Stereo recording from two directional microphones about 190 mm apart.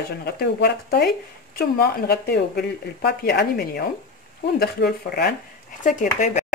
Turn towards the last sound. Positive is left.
turn(degrees=45)  # may be behind; listen again after turning